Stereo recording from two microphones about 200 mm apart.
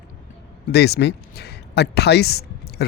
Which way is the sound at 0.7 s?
55° left (ahead or behind).